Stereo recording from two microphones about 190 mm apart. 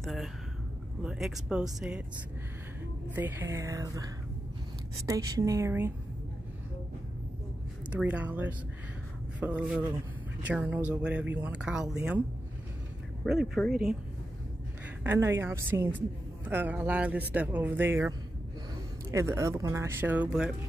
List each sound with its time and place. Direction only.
0.0 s speech: centre (ahead or behind)
3.2 s speech: 10° right (ahead or behind)
7.9 s speech: 5° right (ahead or behind)
13.2 s speech: centre (ahead or behind)
15.0 s speech: 15° right (ahead or behind)